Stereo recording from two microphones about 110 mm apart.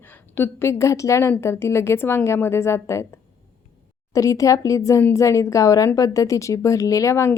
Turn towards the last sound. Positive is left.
turn(degrees=25)  # may be behind; listen again after turning